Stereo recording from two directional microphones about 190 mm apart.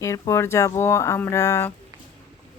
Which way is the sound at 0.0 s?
15° left (ahead or behind).